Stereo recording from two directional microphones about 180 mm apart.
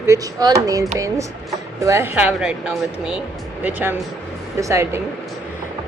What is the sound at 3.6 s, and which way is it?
A woman's voice, 10° right (ahead or behind).